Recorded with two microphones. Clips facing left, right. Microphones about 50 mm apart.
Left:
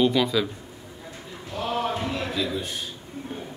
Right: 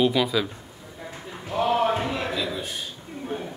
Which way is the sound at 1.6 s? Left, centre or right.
Right.